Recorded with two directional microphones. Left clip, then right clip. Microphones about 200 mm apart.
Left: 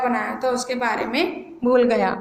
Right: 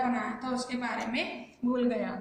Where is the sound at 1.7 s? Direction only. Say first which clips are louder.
Left 14 dB; 45° left (ahead or behind).